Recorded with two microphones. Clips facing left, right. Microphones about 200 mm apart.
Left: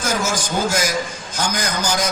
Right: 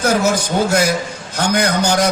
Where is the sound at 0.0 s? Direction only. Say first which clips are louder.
Right 7 dB; 60° right (ahead or behind).